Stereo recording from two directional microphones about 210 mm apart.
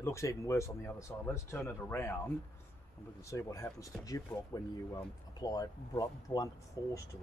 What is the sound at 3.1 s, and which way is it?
Speech, 15° left (ahead or behind).